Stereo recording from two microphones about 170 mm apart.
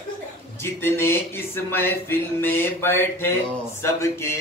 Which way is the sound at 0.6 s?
15° left (ahead or behind).